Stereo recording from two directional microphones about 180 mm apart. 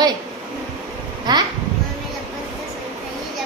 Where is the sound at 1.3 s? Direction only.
25° right (ahead or behind).